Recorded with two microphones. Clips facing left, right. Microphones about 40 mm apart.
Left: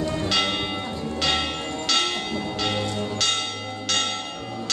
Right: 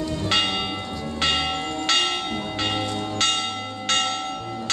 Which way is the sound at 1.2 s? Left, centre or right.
Right.